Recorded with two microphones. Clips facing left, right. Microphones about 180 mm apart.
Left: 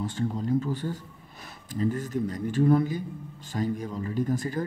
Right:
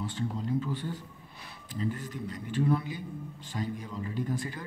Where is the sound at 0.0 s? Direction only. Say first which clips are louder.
Left 5 dB; 45° left (ahead or behind).